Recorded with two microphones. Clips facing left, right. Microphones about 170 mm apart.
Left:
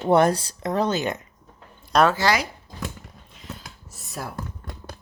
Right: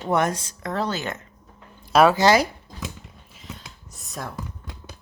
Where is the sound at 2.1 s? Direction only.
20° right (ahead or behind).